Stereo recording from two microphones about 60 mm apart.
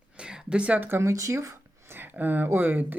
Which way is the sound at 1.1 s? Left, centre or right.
Right.